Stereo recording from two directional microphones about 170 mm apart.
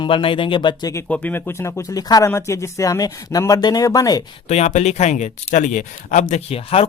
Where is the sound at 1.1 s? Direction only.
10° left (ahead or behind).